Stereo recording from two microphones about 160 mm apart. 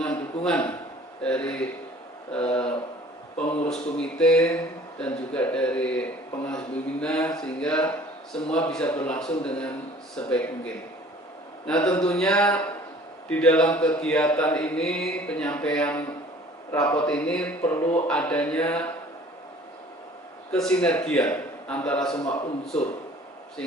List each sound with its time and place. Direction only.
0.0 s a sound: 5° left (ahead or behind)
1.2 s speech: 5° left (ahead or behind)
3.6 s speech: 5° left (ahead or behind)
11.6 s speech: 5° left (ahead or behind)
20.5 s speech: 5° left (ahead or behind)